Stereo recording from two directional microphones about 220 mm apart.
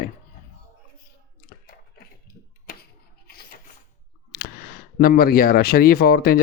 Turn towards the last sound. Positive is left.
turn(degrees=45)  # may be behind; listen again after turning